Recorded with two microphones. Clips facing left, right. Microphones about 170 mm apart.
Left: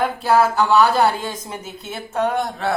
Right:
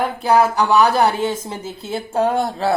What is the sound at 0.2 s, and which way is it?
Speech, 15° right (ahead or behind).